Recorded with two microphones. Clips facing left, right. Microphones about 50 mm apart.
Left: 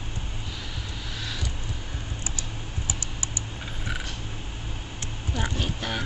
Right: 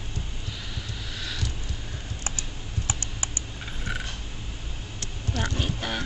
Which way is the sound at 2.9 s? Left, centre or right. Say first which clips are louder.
Right 1 dB; right.